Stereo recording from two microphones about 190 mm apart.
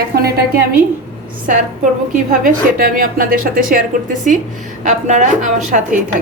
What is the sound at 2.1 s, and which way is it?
A woman's voice, 45° right (ahead or behind).